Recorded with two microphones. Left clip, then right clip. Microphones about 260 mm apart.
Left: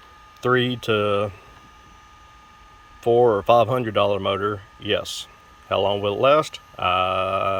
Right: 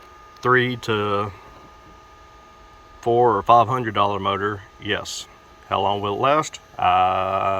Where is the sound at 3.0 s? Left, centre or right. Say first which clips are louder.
Even; centre.